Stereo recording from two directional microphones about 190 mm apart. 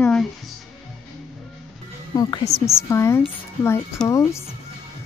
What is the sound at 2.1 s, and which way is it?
A woman's voice, 20° left (ahead or behind).